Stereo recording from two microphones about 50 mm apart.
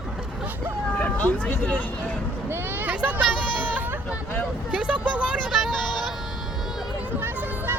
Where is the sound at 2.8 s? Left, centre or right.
Right.